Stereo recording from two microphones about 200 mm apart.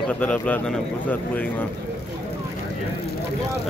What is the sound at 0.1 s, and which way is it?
Speech, 5° left (ahead or behind).